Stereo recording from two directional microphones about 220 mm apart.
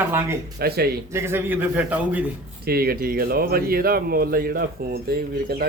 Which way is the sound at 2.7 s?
45° right (ahead or behind).